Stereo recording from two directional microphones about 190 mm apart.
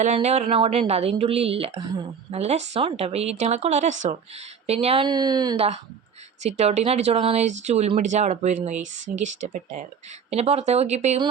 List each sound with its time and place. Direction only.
0.0 s a woman's voice: 35° right (ahead or behind)
5.5 s speech: 35° right (ahead or behind)